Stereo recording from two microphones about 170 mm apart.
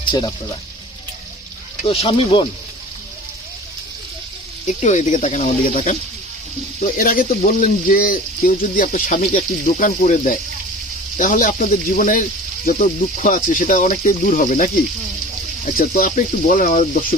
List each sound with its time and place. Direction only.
1.8 s speech: 35° left (ahead or behind)
4.6 s speech: 45° left (ahead or behind)